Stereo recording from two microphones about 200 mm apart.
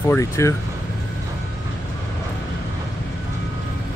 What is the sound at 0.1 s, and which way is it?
Speech, 15° left (ahead or behind).